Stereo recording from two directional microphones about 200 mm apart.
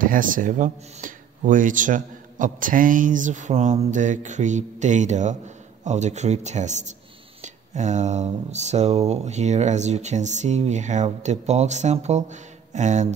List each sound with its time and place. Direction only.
0.0 s speech: 45° right (ahead or behind)